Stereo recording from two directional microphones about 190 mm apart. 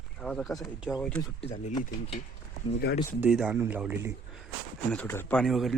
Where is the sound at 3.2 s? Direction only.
5° right (ahead or behind).